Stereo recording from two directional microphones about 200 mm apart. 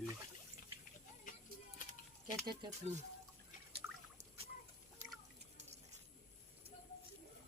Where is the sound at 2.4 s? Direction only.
20° right (ahead or behind).